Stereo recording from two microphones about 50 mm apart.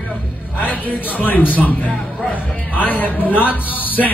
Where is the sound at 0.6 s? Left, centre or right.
Left.